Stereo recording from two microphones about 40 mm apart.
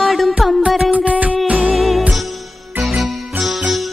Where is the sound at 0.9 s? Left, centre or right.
Right.